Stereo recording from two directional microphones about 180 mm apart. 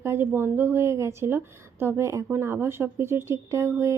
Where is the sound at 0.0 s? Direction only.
15° right (ahead or behind).